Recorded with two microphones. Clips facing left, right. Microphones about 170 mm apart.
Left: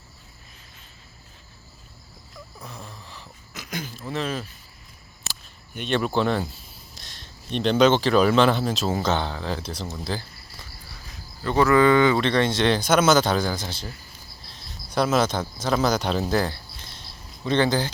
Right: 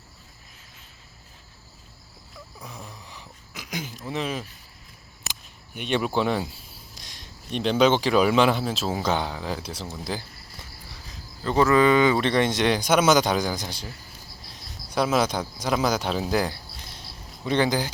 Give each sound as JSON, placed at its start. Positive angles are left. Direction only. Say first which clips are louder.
{"t": 2.6, "sound": "a sound", "louder": "even", "side_deg": -10}
{"t": 6.1, "sound": "speech", "louder": "left 1 dB", "side_deg": -10}
{"t": 11.6, "sound": "speech", "louder": "left 1 dB", "side_deg": -20}
{"t": 14.8, "sound": "speech", "louder": "left 1 dB", "side_deg": -10}